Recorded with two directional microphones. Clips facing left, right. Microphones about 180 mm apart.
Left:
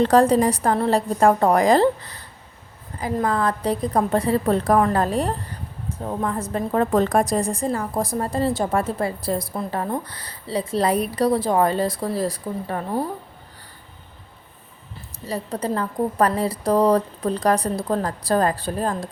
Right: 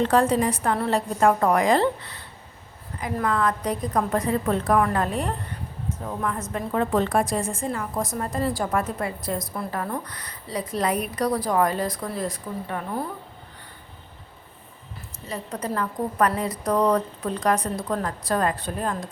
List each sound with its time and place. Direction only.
0.0 s a woman's voice: 35° left (ahead or behind)
15.3 s a woman's voice: 30° left (ahead or behind)